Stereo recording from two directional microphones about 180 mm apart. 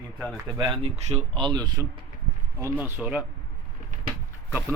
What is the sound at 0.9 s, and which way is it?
Speech, 35° right (ahead or behind).